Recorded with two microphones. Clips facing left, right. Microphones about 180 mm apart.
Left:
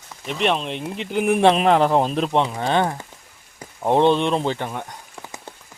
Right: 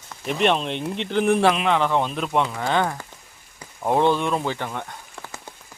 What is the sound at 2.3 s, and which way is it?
Speech, 20° left (ahead or behind).